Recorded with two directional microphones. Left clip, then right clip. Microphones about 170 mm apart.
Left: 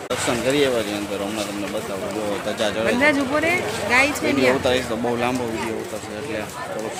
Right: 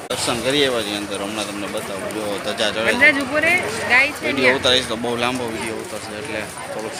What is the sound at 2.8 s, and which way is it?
Speech, 50° left (ahead or behind).